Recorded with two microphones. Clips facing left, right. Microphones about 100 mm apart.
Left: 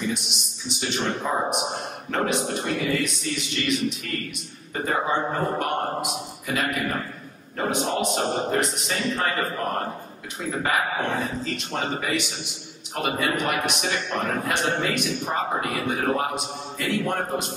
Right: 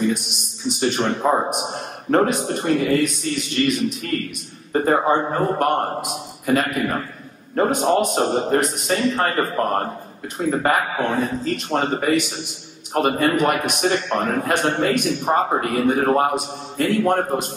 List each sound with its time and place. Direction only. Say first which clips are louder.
0.1 s a man's voice: right 5 dB; 45° right (ahead or behind)